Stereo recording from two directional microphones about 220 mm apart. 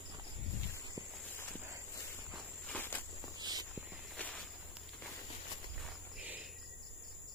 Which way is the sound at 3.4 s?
15° right (ahead or behind).